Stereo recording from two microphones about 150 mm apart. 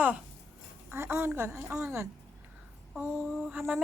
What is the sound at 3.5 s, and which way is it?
Speech, 10° right (ahead or behind).